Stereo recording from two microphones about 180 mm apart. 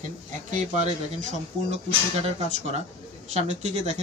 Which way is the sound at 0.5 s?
40° right (ahead or behind).